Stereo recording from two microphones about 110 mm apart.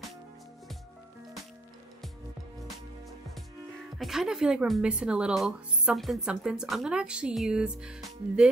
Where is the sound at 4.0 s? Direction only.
5° right (ahead or behind).